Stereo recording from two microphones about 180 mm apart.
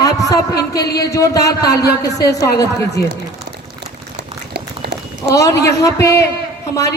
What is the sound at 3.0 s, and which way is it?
Speech, 60° left (ahead or behind).